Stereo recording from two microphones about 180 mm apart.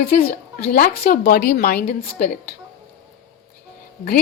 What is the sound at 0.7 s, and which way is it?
A woman's voice, 50° left (ahead or behind).